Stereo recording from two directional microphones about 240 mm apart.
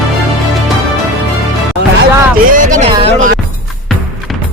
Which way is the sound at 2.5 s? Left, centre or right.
Right.